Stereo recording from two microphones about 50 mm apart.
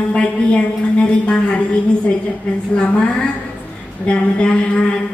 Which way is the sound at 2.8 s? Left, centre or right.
Left.